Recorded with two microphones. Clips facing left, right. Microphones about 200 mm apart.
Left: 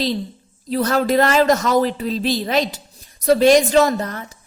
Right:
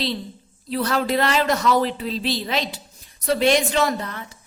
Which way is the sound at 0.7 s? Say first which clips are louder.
Left 4 dB; 45° left (ahead or behind).